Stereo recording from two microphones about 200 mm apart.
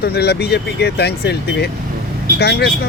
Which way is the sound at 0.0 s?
55° left (ahead or behind).